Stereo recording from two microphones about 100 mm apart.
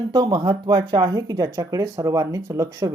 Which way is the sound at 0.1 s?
45° right (ahead or behind).